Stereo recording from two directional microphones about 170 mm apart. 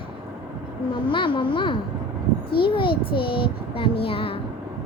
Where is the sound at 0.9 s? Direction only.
30° left (ahead or behind).